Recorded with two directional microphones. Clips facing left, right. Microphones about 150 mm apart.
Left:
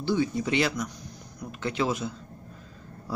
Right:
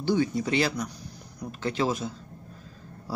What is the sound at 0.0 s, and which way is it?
Speech, 45° right (ahead or behind).